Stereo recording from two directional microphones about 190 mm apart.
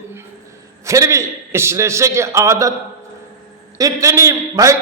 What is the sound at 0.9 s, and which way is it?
A man's voice, 15° right (ahead or behind).